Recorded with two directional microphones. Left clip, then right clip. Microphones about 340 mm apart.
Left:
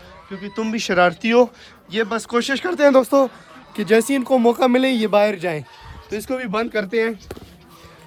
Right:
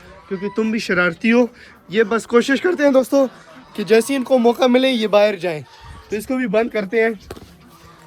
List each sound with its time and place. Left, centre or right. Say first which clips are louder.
0.3 s speech: right 5 dB; centre
2.8 s speech: left 2 dB; left
3.8 s speech: right 1 dB; centre
6.1 s speech: right 3 dB; centre